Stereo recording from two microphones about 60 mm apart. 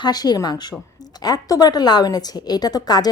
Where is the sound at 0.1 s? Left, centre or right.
Left.